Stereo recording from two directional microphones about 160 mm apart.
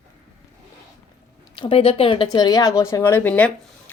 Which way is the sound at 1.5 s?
35° left (ahead or behind).